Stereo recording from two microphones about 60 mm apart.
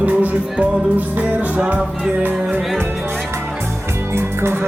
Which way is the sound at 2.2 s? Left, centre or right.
Right.